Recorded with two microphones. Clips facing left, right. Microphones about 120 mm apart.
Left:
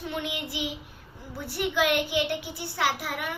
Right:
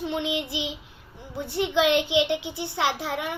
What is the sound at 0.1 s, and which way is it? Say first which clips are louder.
A child's voice: right 5 dB; 25° right (ahead or behind).